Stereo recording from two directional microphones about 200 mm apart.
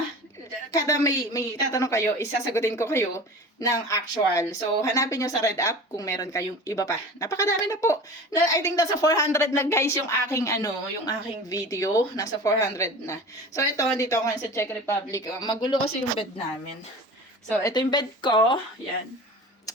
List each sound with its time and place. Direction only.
0.7 s speech: 15° left (ahead or behind)
17.5 s speech: 15° left (ahead or behind)